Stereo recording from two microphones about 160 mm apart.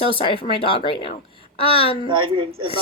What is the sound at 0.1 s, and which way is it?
A woman's voice, 35° left (ahead or behind).